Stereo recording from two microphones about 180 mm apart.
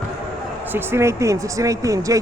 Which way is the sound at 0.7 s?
10° right (ahead or behind).